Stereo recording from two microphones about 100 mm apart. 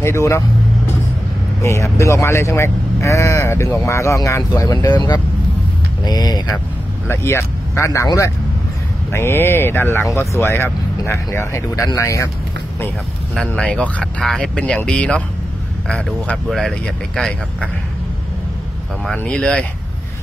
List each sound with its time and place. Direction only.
0.0 s speech: 30° left (ahead or behind)
1.6 s speech: 30° left (ahead or behind)
7.1 s speech: 25° left (ahead or behind)
9.1 s speech: 25° left (ahead or behind)
13.5 s speech: 10° left (ahead or behind)
19.1 s speech: 10° left (ahead or behind)